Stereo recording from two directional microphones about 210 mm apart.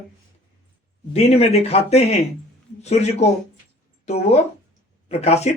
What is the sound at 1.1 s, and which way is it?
Speech, 30° left (ahead or behind).